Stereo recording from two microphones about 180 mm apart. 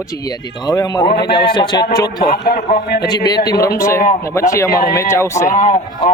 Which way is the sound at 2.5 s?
40° left (ahead or behind).